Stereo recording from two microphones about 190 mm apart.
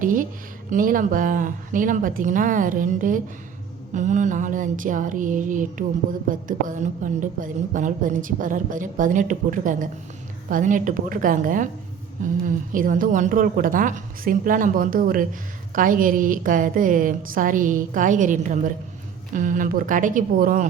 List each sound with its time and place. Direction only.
0.0 s a woman's voice: 45° right (ahead or behind)